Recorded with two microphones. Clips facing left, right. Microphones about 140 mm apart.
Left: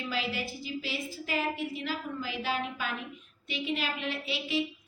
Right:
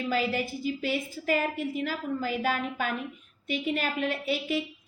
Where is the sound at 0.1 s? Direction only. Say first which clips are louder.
Right 6 dB; 50° right (ahead or behind).